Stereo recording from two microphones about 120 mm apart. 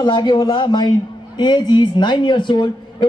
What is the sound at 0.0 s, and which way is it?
A man's voice, 40° left (ahead or behind).